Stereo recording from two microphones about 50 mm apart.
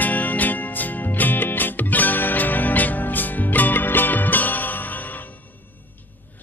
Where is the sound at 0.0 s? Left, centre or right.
Left.